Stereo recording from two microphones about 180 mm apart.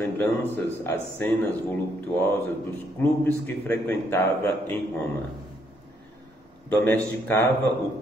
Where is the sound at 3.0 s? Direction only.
10° left (ahead or behind).